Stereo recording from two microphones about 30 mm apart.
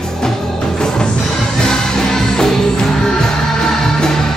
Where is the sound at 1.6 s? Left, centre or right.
Left.